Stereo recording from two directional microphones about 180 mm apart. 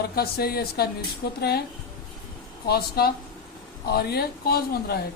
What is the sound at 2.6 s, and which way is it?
Speech, 60° left (ahead or behind).